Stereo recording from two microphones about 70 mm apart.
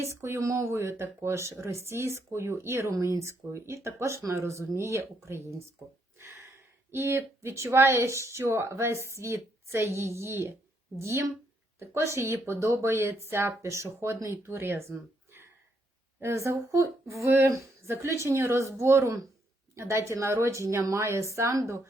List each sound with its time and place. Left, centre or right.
0.0 s speech: right
6.1 s a sound: right
6.9 s speech: right